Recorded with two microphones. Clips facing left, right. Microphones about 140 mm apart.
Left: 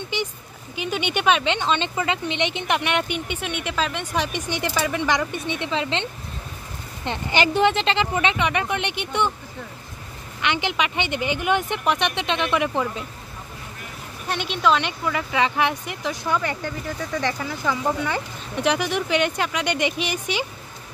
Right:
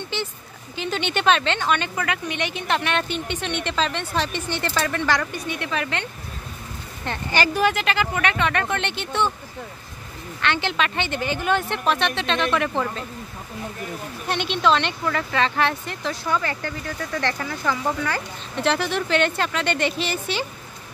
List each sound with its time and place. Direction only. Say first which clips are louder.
0.7 s speech: even; 10° left (ahead or behind)
7.1 s speech: left 1 dB; 20° left (ahead or behind)
10.4 s speech: even; 15° left (ahead or behind)
14.3 s speech: right 1 dB; 5° left (ahead or behind)